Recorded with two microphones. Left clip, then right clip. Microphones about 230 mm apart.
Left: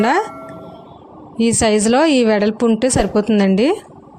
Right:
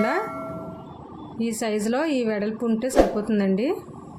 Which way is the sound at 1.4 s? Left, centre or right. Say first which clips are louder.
Left 11 dB; left.